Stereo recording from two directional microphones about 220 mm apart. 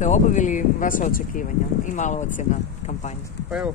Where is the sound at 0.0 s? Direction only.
35° left (ahead or behind).